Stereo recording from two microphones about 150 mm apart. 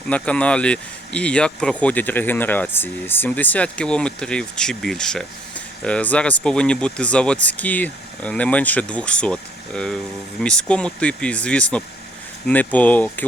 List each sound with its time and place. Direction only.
0.1 s speech: 10° left (ahead or behind)